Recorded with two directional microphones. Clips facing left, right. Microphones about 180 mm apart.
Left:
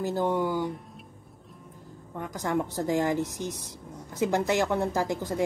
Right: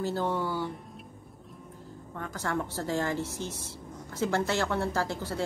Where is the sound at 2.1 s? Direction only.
15° left (ahead or behind).